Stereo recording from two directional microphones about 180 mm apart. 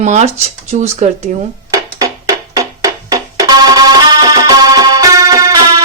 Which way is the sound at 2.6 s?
20° right (ahead or behind).